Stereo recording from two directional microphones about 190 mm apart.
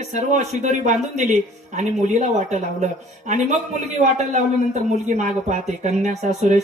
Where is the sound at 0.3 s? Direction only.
40° right (ahead or behind).